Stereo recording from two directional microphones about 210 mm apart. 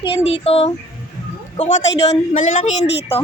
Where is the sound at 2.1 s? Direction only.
35° left (ahead or behind).